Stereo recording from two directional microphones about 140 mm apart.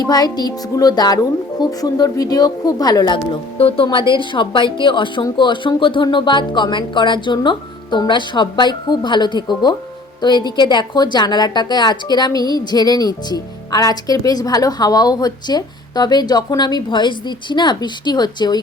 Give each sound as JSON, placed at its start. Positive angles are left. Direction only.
{"t": 0.0, "sound": "a woman's voice", "side_deg": 30}
{"t": 3.6, "sound": "a woman's voice", "side_deg": 45}